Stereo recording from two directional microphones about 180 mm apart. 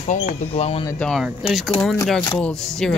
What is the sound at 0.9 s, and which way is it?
Music, centre (ahead or behind).